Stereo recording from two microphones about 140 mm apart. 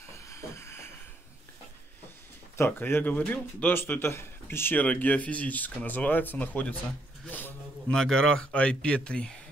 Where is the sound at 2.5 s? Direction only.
15° left (ahead or behind).